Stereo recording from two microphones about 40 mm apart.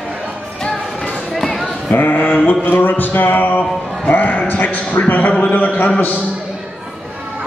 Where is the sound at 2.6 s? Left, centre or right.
Left.